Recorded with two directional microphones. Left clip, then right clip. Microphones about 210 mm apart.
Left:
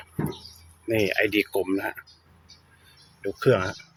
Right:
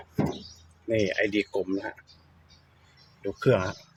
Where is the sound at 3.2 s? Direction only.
Centre (ahead or behind).